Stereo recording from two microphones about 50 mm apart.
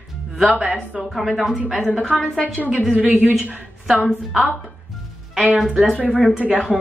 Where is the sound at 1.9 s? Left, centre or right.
Left.